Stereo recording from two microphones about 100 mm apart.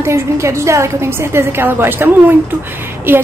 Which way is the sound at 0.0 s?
30° right (ahead or behind).